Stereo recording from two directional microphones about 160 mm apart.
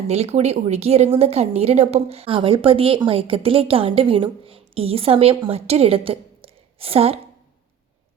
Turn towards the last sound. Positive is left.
turn(degrees=-35)  # may be behind; listen again after turning